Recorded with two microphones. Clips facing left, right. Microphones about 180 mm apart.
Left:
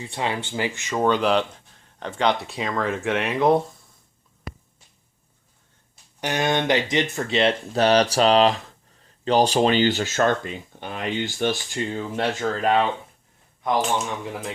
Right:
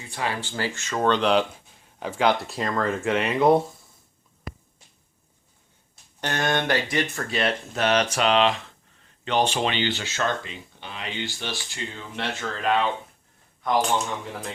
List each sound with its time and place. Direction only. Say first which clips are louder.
0.0 s speech: left 2 dB; 25° left (ahead or behind)
1.0 s speech: even; 5° left (ahead or behind)
6.1 s speech: left 2 dB; 15° left (ahead or behind); by 12.9 s 45° left (ahead or behind)